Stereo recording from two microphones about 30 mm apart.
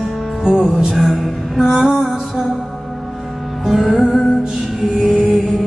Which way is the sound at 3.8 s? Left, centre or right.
Centre.